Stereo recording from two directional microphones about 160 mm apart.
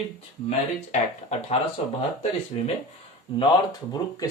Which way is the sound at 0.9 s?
45° left (ahead or behind).